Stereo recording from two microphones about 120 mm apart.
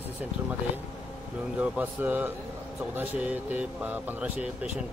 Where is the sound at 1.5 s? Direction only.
10° right (ahead or behind).